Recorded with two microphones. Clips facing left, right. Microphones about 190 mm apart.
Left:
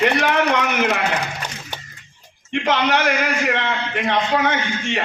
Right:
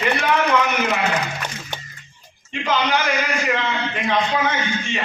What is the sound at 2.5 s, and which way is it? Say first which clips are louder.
A man's voice: left 2 dB; 65° left (ahead or behind).